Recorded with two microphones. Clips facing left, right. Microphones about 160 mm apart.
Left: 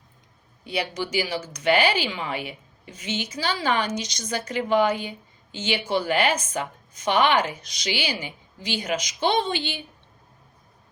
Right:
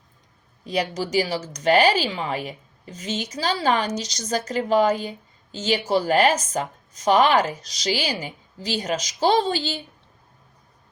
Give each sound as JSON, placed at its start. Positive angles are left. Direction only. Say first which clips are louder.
{"t": 0.6, "sound": "speech", "louder": "right 3 dB", "side_deg": -35}